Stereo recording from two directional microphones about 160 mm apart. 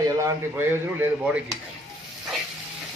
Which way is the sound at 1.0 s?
10° right (ahead or behind).